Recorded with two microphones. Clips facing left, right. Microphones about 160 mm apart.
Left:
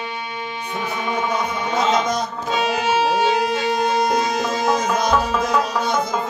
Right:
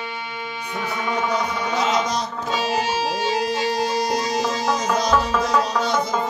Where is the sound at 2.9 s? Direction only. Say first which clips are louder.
Left 5 dB; 65° left (ahead or behind).